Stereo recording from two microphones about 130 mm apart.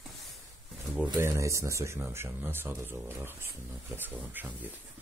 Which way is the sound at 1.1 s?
25° right (ahead or behind).